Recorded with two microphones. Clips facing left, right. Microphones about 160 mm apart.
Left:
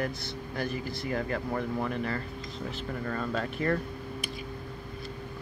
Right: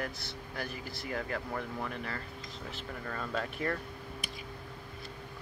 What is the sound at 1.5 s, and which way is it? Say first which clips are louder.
Speech: left 6 dB; 25° left (ahead or behind).